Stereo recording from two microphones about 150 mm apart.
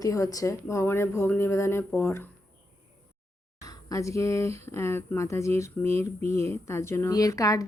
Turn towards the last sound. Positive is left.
turn(degrees=20)  # may be behind; listen again after turning